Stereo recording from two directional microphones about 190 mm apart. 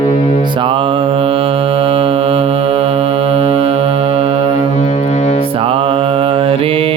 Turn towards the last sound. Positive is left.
turn(degrees=-30)  # may be behind; listen again after turning